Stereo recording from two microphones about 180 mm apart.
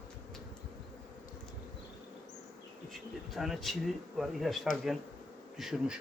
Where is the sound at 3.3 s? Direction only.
Centre (ahead or behind).